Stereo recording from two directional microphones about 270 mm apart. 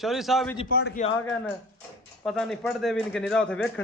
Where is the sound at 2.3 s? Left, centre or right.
Centre.